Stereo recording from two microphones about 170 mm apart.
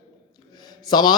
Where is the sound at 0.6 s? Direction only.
25° left (ahead or behind).